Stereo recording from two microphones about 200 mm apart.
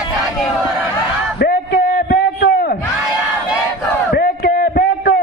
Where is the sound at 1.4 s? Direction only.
50° left (ahead or behind).